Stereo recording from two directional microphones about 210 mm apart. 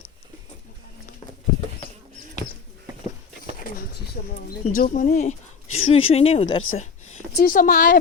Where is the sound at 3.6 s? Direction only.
45° left (ahead or behind).